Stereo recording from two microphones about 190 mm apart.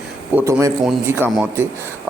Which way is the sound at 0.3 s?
15° right (ahead or behind).